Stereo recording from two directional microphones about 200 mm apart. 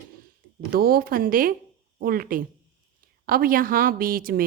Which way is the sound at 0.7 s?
50° right (ahead or behind).